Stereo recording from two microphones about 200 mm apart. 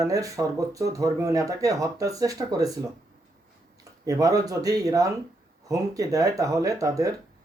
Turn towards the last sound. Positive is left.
turn(degrees=-15)  # may be behind; listen again after turning